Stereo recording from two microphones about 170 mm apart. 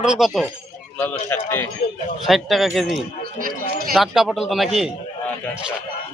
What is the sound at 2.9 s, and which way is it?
Speech, 55° right (ahead or behind).